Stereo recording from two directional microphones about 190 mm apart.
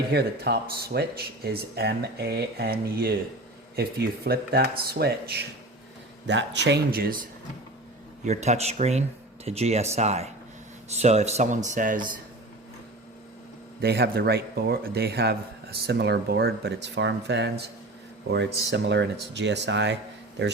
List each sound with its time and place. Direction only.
0.1 s speech: 60° right (ahead or behind)
8.2 s speech: 35° right (ahead or behind)
13.8 s speech: 55° right (ahead or behind)